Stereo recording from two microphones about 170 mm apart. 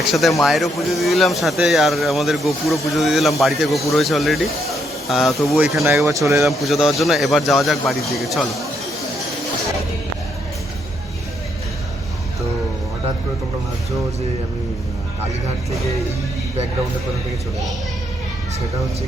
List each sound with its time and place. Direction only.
0.1 s speech: centre (ahead or behind)
5.8 s speech: 15° right (ahead or behind)
6.4 s speech: centre (ahead or behind)